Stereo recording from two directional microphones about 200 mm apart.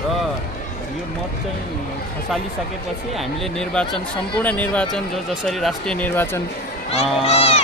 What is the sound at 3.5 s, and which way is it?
Speech, 5° left (ahead or behind).